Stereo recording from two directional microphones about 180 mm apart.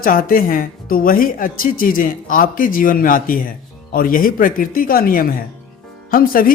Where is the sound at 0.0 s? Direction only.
50° left (ahead or behind).